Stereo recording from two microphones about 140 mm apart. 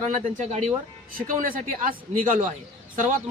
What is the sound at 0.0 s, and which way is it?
Speech, 55° right (ahead or behind).